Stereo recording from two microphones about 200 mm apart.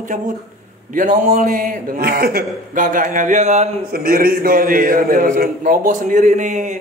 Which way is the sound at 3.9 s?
45° right (ahead or behind).